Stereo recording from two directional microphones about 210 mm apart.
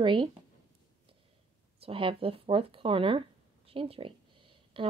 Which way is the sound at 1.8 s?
25° right (ahead or behind).